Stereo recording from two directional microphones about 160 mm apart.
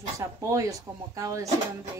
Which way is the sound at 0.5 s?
20° right (ahead or behind).